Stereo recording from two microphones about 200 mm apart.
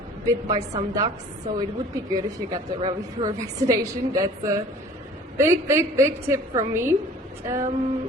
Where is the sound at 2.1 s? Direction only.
20° right (ahead or behind).